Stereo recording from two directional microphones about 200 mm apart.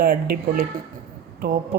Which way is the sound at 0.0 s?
50° right (ahead or behind).